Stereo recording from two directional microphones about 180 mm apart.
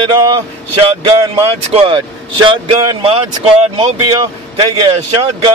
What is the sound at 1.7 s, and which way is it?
Speech, 30° right (ahead or behind).